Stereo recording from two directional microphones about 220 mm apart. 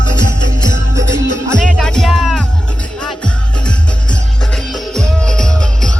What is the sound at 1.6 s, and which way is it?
Music, 5° left (ahead or behind).